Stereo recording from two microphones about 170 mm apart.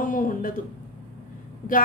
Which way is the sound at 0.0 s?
55° left (ahead or behind).